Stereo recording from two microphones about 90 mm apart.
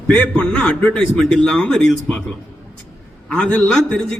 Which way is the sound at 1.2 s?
5° left (ahead or behind).